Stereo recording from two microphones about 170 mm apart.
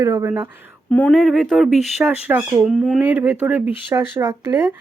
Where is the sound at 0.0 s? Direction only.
20° right (ahead or behind).